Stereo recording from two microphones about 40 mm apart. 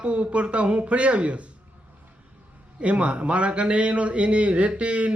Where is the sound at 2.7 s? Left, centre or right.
Right.